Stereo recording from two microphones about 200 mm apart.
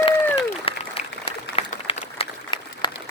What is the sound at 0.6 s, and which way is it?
Applause, 30° left (ahead or behind).